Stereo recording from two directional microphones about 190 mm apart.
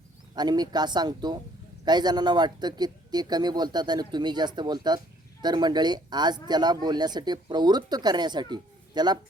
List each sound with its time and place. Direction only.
0.3 s speech: 20° right (ahead or behind)